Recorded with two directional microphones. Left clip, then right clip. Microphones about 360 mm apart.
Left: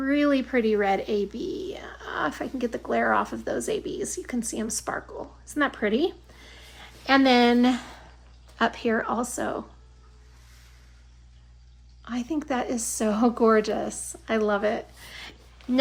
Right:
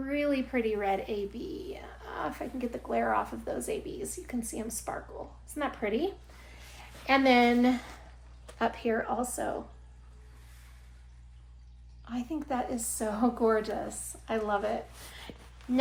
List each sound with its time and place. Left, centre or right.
0.1 s speech: left
12.0 s speech: left